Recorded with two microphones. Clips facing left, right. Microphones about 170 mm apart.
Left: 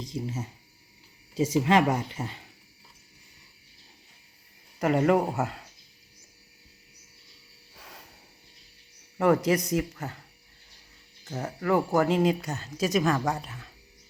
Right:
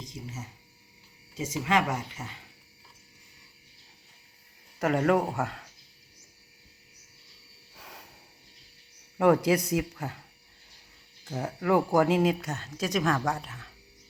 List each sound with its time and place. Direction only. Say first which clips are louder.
0.0 s speech: left 7 dB; 30° left (ahead or behind)
4.8 s speech: left 2 dB; centre (ahead or behind)
7.8 s a sound: even; 5° right (ahead or behind)
9.1 s a man's voice: even; 10° right (ahead or behind)
11.3 s speech: even; 5° right (ahead or behind)